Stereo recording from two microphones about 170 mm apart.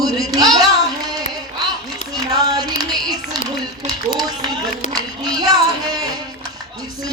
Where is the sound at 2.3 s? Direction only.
20° right (ahead or behind).